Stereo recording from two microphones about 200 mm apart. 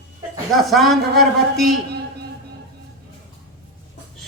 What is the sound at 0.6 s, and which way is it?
Speech, centre (ahead or behind).